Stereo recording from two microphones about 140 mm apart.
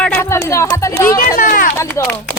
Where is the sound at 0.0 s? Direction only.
15° left (ahead or behind).